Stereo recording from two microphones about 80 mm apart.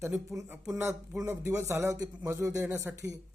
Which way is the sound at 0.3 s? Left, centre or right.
Centre.